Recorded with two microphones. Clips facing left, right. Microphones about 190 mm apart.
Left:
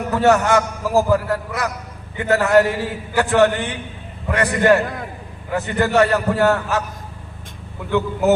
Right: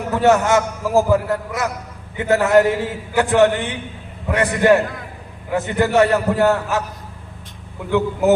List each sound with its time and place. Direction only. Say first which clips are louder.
0.1 s a man's voice: right 1 dB; 15° right (ahead or behind)
7.9 s a man's voice: right 1 dB; 15° right (ahead or behind)